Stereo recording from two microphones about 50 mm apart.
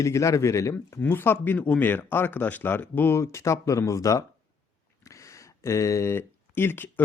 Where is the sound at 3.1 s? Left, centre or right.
Left.